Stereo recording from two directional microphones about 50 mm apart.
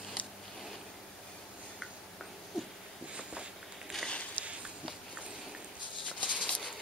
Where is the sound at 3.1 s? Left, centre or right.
Right.